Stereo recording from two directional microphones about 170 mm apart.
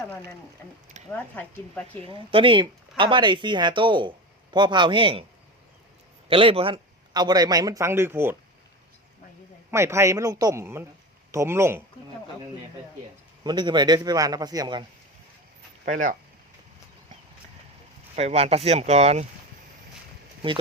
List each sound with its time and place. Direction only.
1.1 s speech: 10° left (ahead or behind)
1.9 s a man's voice: 30° right (ahead or behind)
6.2 s a man's voice: 35° right (ahead or behind); by 8.4 s 15° right (ahead or behind)
9.7 s a man's voice: 15° right (ahead or behind)
13.4 s a man's voice: 25° right (ahead or behind)
15.8 s speech: 50° right (ahead or behind)
18.2 s speech: 40° right (ahead or behind)